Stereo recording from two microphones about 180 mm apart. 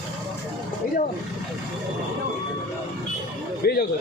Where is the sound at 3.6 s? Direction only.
60° left (ahead or behind).